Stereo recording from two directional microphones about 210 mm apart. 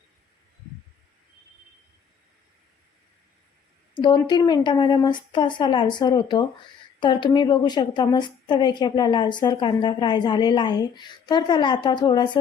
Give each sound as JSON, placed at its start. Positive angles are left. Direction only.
{"t": 4.0, "sound": "a woman's voice", "side_deg": 20}